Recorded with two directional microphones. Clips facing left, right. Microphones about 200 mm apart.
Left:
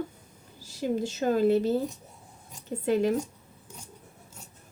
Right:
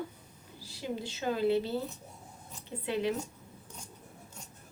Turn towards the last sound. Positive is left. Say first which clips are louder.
# left 7 dB
turn(degrees=45)  # may be behind; listen again after turning